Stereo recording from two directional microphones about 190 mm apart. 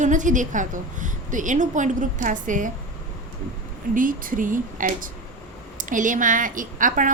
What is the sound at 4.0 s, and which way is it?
A woman's voice, 45° right (ahead or behind).